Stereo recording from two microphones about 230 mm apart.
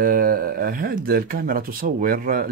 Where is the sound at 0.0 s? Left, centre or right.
Right.